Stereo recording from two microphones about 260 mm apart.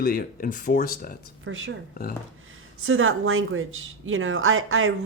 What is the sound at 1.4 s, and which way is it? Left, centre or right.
Speech, right.